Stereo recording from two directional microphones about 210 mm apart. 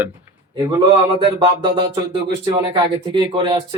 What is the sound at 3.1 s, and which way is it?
Speech, 25° right (ahead or behind).